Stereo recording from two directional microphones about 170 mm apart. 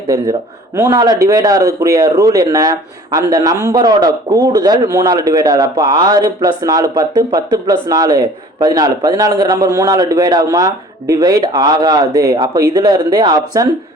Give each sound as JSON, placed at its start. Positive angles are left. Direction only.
{"t": 0.8, "sound": "speech", "side_deg": -20}